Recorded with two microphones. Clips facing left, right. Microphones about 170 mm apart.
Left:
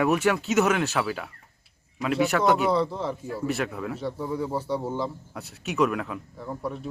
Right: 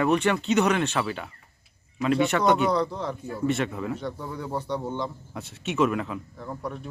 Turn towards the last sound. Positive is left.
turn(degrees=5)  # may be behind; listen again after turning